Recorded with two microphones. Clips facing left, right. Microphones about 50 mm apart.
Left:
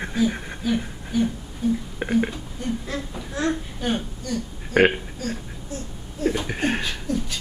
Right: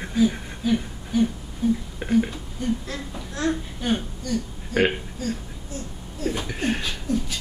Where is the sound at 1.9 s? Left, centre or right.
Left.